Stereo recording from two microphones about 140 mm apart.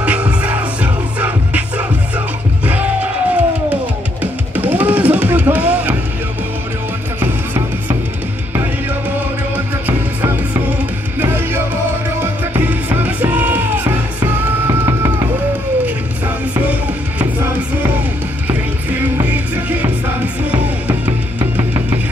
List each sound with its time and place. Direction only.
0.0 s music: 10° right (ahead or behind)
11.1 s music: 15° right (ahead or behind)